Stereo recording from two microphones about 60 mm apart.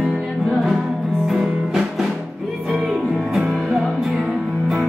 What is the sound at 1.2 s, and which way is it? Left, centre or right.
Music, centre.